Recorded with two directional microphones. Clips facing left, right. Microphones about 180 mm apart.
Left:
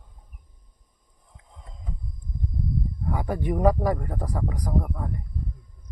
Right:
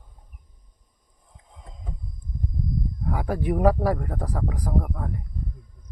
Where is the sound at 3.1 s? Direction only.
5° right (ahead or behind).